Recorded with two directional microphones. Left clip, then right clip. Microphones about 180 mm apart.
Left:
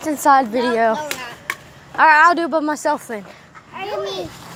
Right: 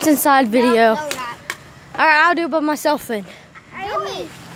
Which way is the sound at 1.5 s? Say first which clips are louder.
Left 2 dB; 40° left (ahead or behind).